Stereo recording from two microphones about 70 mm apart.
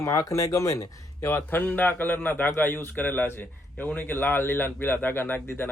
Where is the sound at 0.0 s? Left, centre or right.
Left.